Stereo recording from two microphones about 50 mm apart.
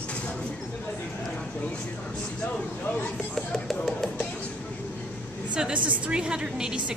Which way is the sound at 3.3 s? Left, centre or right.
Centre.